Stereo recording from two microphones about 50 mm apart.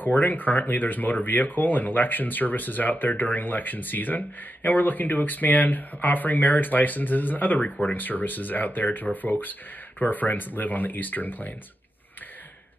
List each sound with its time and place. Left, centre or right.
0.1 s speech: left